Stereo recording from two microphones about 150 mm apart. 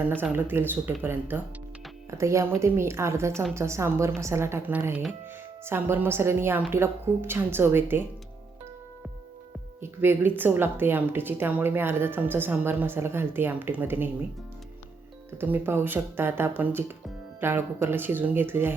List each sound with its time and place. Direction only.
0.0 s speech: 10° right (ahead or behind)
2.0 s speech: 20° right (ahead or behind)
9.8 s speech: 15° right (ahead or behind)
15.4 s speech: 10° right (ahead or behind)